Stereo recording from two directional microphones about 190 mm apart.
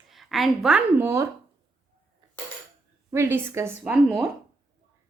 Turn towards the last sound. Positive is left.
turn(degrees=-5)  # may be behind; listen again after turning